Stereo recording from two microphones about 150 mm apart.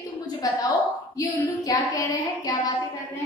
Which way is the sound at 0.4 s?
25° left (ahead or behind).